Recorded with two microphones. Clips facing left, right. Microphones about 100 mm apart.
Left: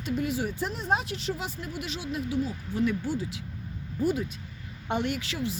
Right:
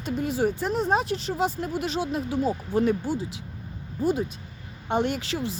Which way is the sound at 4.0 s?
25° right (ahead or behind).